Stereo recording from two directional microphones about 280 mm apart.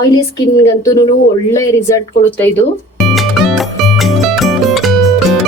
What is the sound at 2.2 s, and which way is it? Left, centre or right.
Speech, centre.